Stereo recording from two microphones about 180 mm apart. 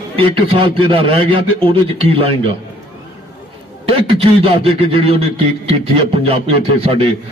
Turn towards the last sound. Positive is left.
turn(degrees=-30)  # may be behind; listen again after turning